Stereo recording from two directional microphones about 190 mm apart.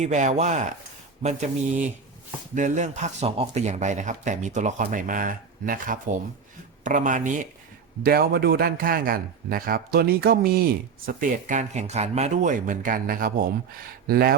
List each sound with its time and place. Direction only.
0.0 s a man's voice: 40° right (ahead or behind)